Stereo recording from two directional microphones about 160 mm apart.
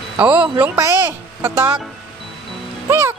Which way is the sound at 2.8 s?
15° right (ahead or behind).